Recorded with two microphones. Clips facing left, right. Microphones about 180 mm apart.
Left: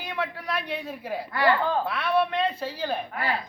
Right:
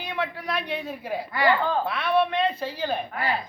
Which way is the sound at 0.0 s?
5° left (ahead or behind).